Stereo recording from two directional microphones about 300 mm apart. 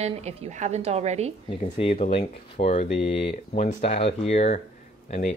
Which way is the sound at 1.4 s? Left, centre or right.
Left.